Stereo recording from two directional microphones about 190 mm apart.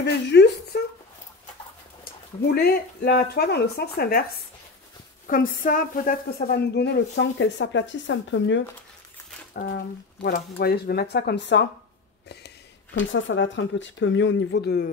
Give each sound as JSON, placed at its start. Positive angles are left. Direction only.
{"t": 0.0, "sound": "speech", "side_deg": 65}
{"t": 2.4, "sound": "speech", "side_deg": 55}
{"t": 5.2, "sound": "speech", "side_deg": 45}
{"t": 10.2, "sound": "speech", "side_deg": 55}